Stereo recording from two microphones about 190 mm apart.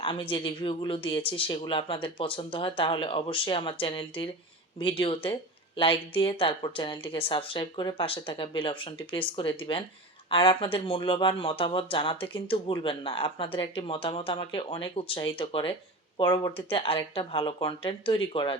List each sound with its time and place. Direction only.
0.0 s speech: 25° left (ahead or behind)